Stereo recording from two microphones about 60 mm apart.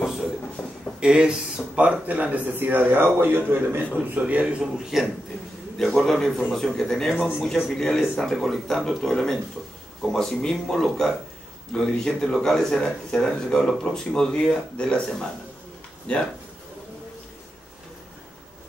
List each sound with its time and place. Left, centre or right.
0.0 s a sound: centre
1.0 s speech: centre; by 3.8 s right
4.1 s speech: right
4.6 s a man's voice: centre